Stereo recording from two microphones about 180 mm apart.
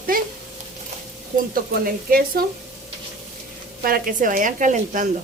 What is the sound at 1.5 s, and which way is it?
Speech, 55° right (ahead or behind).